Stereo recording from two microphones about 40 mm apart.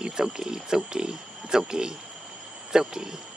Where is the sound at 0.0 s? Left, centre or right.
Centre.